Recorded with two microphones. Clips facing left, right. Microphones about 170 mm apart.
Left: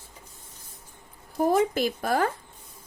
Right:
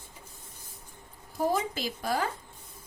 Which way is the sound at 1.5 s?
55° left (ahead or behind).